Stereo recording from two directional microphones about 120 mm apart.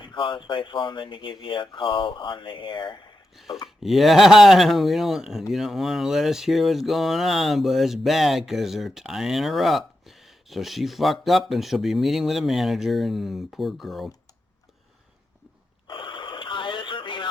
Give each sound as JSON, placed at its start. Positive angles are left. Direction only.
{"t": 0.0, "sound": "speech", "side_deg": 40}
{"t": 3.3, "sound": "speech", "side_deg": 0}
{"t": 15.9, "sound": "radio", "side_deg": 40}